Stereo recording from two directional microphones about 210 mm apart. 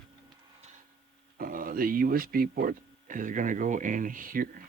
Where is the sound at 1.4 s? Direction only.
40° right (ahead or behind).